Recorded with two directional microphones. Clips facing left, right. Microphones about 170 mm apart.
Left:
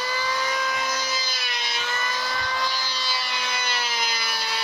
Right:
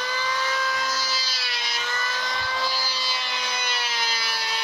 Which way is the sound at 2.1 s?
5° left (ahead or behind).